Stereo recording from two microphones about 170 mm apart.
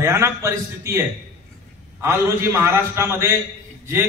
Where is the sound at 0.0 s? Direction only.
15° right (ahead or behind).